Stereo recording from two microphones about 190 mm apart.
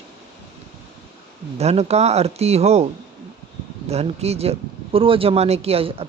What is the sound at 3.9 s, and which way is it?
Speech, 35° right (ahead or behind).